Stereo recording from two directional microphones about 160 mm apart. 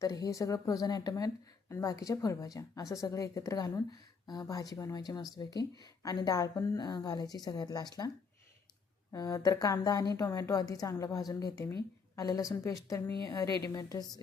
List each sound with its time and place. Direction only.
0.0 s a woman's voice: 20° left (ahead or behind)
9.1 s a woman's voice: 20° left (ahead or behind)